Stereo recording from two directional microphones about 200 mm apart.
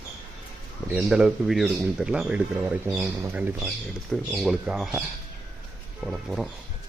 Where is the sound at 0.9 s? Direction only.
5° right (ahead or behind).